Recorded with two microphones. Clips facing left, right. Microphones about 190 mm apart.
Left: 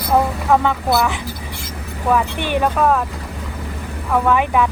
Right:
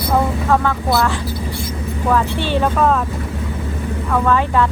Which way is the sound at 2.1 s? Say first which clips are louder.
Even; 15° left (ahead or behind).